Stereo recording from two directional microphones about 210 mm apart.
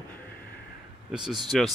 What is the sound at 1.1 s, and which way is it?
Speech, centre (ahead or behind).